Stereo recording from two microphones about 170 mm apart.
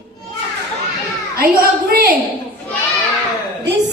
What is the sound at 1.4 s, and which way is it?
Speech, 60° right (ahead or behind).